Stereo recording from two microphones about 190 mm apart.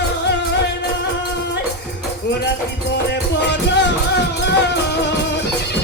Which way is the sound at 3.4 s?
65° left (ahead or behind).